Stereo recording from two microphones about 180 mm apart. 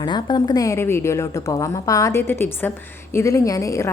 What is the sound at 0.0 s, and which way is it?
A woman's voice, 25° left (ahead or behind).